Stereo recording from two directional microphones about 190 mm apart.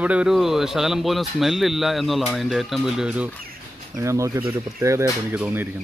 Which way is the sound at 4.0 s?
15° right (ahead or behind).